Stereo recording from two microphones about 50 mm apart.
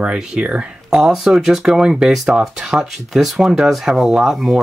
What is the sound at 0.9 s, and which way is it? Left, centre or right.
Speech, centre.